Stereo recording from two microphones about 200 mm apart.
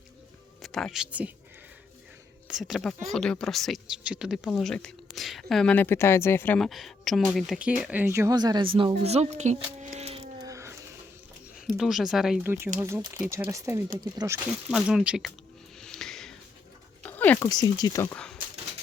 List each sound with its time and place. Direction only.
0.6 s speech: centre (ahead or behind)
2.5 s a woman's voice: centre (ahead or behind); by 9.9 s 35° right (ahead or behind)
10.0 s music: 30° right (ahead or behind)
10.4 s music: 15° right (ahead or behind)
11.8 s a woman's voice: centre (ahead or behind); by 14.3 s 20° right (ahead or behind)
14.7 s a woman's voice: centre (ahead or behind)
15.8 s music: centre (ahead or behind)
17.0 s speech: 10° left (ahead or behind)